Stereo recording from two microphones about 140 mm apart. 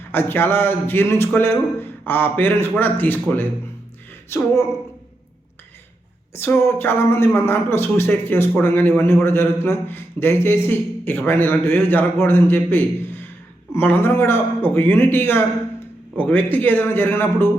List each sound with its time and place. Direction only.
0.1 s a man's voice: 15° left (ahead or behind)
6.3 s a man's voice: 15° left (ahead or behind)